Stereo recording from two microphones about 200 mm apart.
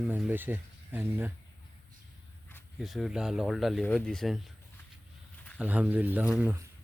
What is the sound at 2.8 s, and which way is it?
Speech, centre (ahead or behind).